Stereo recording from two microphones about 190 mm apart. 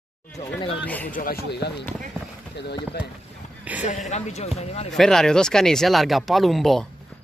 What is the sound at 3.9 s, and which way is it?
A man's voice, 40° left (ahead or behind).